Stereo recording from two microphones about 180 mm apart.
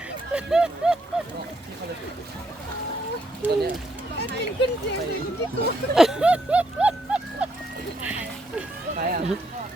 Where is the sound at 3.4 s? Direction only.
10° right (ahead or behind).